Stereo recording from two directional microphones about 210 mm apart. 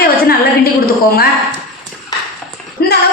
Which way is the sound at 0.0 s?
45° left (ahead or behind).